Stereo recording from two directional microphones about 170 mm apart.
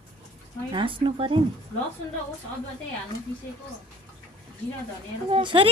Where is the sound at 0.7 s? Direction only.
30° right (ahead or behind).